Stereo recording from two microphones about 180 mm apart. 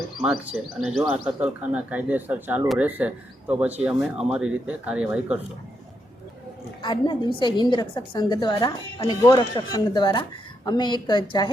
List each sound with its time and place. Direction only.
0.9 s speech: 5° right (ahead or behind)
6.8 s a woman's voice: 25° left (ahead or behind)